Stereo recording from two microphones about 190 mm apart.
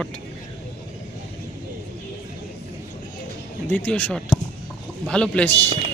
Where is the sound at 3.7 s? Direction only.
10° left (ahead or behind).